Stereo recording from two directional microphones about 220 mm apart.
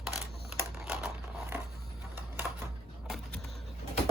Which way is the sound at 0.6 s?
10° right (ahead or behind).